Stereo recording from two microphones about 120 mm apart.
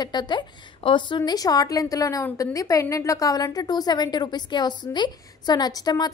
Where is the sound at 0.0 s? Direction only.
40° left (ahead or behind).